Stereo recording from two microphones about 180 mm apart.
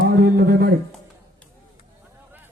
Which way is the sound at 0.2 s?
65° right (ahead or behind).